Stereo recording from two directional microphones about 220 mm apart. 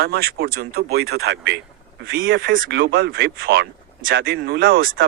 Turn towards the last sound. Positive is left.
turn(degrees=-40)  # may be behind; listen again after turning